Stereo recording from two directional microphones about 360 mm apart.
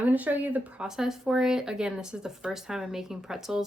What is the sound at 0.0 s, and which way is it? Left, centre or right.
A woman's voice, centre.